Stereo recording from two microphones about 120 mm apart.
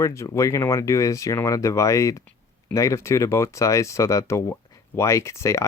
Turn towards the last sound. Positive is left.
turn(degrees=25)  # may be behind; listen again after turning